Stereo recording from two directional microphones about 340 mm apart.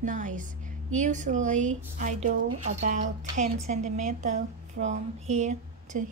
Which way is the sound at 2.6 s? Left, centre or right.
Right.